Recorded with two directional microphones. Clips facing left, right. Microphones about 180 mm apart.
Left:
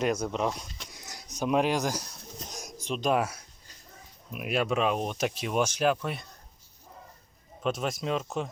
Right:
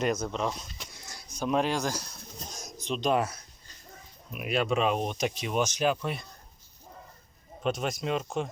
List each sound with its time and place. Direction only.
0.2 s speech: 10° left (ahead or behind)
0.9 s a sound: 15° left (ahead or behind)
1.5 s speech: 10° left (ahead or behind)
2.5 s a sound: 10° left (ahead or behind)
4.3 s speech: centre (ahead or behind)
7.6 s speech: centre (ahead or behind)